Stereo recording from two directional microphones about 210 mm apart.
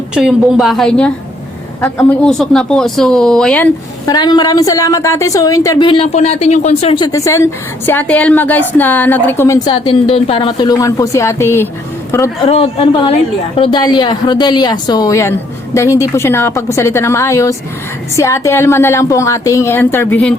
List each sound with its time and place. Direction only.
0.1 s a woman's voice: centre (ahead or behind)
4.0 s a woman's voice: 20° left (ahead or behind)
12.5 s a woman's voice: 25° left (ahead or behind); by 20.3 s 5° left (ahead or behind)